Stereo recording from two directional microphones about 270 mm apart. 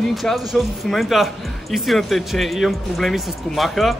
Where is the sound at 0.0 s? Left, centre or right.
Centre.